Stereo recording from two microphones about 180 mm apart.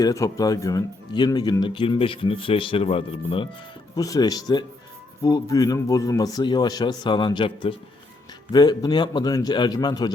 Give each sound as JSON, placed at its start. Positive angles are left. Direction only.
{"t": 0.0, "sound": "speech", "side_deg": 20}
{"t": 3.9, "sound": "speech", "side_deg": 20}